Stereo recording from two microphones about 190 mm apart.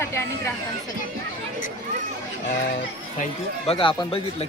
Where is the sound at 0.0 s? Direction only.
15° left (ahead or behind).